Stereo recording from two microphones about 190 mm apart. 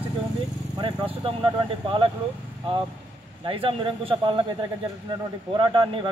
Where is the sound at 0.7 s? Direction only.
25° right (ahead or behind).